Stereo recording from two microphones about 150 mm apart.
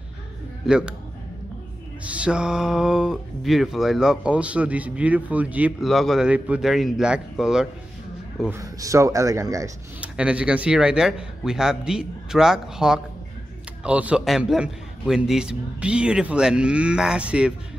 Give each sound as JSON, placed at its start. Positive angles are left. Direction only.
{"t": 0.7, "sound": "speech", "side_deg": -5}
{"t": 2.0, "sound": "speech", "side_deg": -5}
{"t": 8.5, "sound": "speech", "side_deg": -20}
{"t": 9.9, "sound": "a man's voice", "side_deg": -10}